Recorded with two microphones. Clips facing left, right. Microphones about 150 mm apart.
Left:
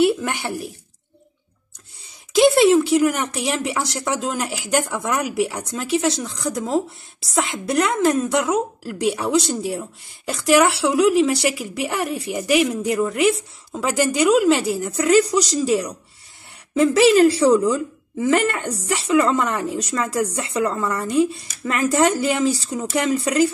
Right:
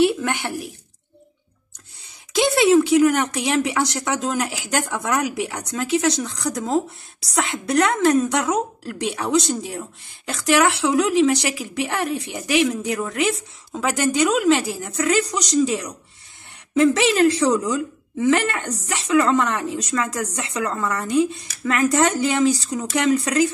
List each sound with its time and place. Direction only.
0.0 s a woman's voice: 5° left (ahead or behind)
2.3 s a woman's voice: centre (ahead or behind)